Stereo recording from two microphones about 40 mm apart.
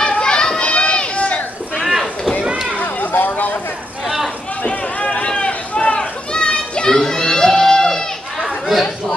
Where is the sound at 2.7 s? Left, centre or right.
Left.